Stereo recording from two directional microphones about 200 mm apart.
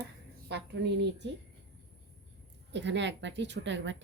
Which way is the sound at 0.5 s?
55° right (ahead or behind).